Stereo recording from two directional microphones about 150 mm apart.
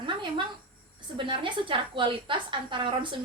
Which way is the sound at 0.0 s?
30° right (ahead or behind).